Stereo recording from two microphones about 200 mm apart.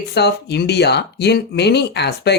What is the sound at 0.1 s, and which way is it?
Speech, 55° left (ahead or behind).